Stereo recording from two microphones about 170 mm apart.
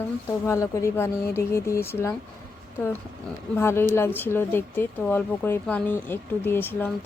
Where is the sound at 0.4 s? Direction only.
15° left (ahead or behind).